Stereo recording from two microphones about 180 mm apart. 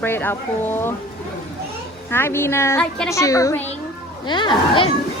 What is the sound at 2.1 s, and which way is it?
Speech, 15° left (ahead or behind).